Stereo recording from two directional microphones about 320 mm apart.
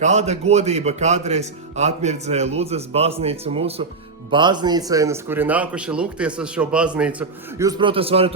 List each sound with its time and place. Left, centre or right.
0.0 s a man's voice: right